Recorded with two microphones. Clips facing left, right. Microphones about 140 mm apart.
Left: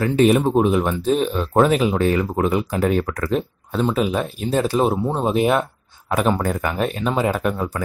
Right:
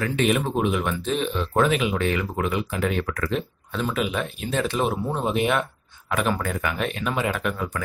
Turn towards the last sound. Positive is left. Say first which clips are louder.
# left 5 dB
turn(degrees=35)  # may be behind; listen again after turning